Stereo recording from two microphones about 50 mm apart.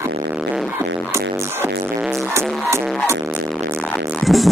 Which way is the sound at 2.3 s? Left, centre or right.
Right.